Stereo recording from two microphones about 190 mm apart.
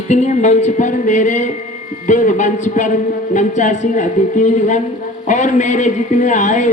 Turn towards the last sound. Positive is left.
turn(degrees=40)  # may be behind; listen again after turning